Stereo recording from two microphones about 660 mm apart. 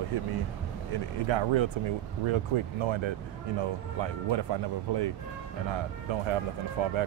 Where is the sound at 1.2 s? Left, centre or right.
Right.